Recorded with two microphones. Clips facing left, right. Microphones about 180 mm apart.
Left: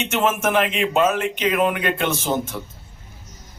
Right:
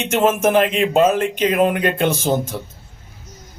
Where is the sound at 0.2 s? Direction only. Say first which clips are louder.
Right 5 dB; 40° right (ahead or behind).